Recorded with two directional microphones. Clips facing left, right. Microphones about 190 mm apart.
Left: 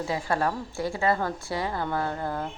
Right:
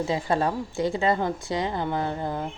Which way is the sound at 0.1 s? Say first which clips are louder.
Right 1 dB; 20° right (ahead or behind).